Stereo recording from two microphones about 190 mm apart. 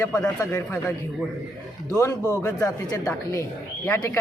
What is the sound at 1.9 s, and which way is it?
Speech, 20° left (ahead or behind).